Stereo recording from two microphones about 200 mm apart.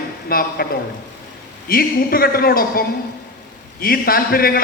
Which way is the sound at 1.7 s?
50° left (ahead or behind).